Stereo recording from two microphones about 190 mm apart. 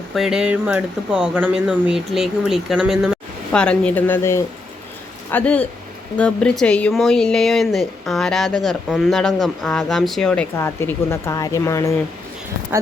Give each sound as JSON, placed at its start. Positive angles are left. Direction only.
{"t": 0.1, "sound": "speech", "side_deg": 0}